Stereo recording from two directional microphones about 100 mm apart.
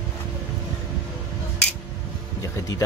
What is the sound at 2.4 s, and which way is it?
Music, 35° left (ahead or behind).